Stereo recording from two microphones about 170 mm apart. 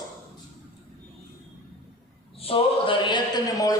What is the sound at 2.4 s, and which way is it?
Speech, 30° left (ahead or behind).